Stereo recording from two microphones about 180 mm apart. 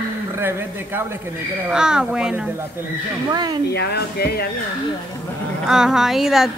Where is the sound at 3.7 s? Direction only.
65° left (ahead or behind).